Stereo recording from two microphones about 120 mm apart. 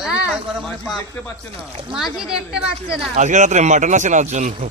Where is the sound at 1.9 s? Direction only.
5° right (ahead or behind).